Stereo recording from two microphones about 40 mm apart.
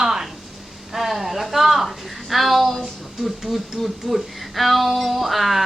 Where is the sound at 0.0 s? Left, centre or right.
Centre.